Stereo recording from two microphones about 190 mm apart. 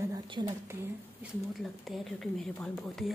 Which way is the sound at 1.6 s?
Centre (ahead or behind).